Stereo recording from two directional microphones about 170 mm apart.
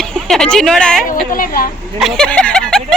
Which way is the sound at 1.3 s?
55° left (ahead or behind).